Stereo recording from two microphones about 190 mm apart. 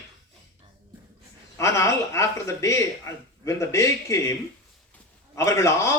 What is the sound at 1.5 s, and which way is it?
A man's voice, 15° left (ahead or behind).